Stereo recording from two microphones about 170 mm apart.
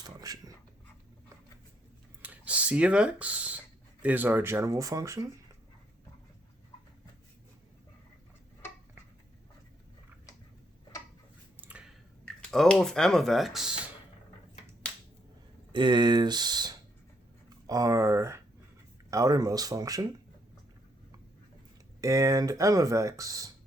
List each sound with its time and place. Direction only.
0.2 s dog: 20° right (ahead or behind)
2.3 s a sound: 10° right (ahead or behind)
4.0 s speech: 10° right (ahead or behind)
11.6 s a sound: 5° right (ahead or behind)
12.4 s speech: 5° left (ahead or behind)
15.7 s speech: 25° right (ahead or behind)
22.0 s speech: 20° right (ahead or behind)